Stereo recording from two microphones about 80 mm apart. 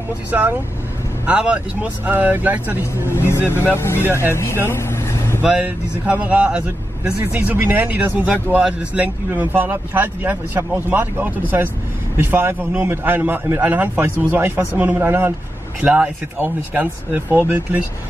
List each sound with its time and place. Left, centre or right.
0.3 s speech: right
3.1 s speech: left
4.0 s speech: right
4.3 s speech: left
4.6 s vehicle: left
5.4 s speech: centre
15.8 s speech: centre
16.3 s speech: right